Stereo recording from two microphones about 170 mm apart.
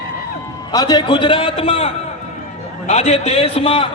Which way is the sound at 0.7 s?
20° left (ahead or behind).